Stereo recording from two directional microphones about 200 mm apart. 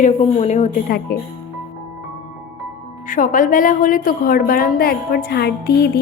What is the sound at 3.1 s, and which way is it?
A woman's voice, 40° left (ahead or behind).